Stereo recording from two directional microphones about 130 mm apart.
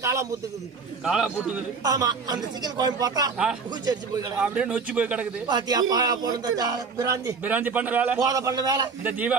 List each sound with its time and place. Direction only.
0.0 s speech: 25° right (ahead or behind)
1.0 s a man's voice: 5° right (ahead or behind)
1.8 s speech: 30° right (ahead or behind)
4.4 s speech: 10° right (ahead or behind)
5.5 s speech: 30° right (ahead or behind)
7.2 s speech: 15° right (ahead or behind)
8.2 s speech: 25° right (ahead or behind)